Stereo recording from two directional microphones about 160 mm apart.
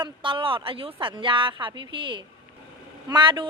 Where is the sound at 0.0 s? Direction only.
30° right (ahead or behind).